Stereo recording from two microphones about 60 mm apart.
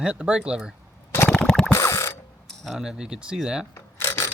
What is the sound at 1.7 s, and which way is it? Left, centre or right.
Ratchet, left.